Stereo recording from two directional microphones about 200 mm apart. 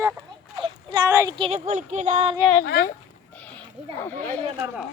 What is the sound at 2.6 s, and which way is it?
Speech, 50° left (ahead or behind).